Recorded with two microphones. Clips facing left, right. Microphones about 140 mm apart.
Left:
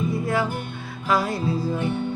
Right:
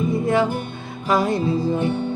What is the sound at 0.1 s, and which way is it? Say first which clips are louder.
Music: right 5 dB; 20° right (ahead or behind).